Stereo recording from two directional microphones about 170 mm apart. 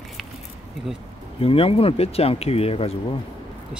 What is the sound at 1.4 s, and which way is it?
Speech, 35° left (ahead or behind).